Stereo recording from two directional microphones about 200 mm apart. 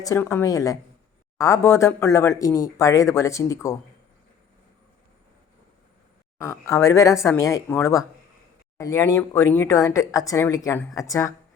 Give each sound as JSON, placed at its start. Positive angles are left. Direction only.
{"t": 0.0, "sound": "speech", "side_deg": 15}
{"t": 6.7, "sound": "speech", "side_deg": 15}